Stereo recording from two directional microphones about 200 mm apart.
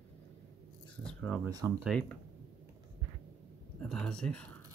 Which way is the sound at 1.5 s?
20° right (ahead or behind).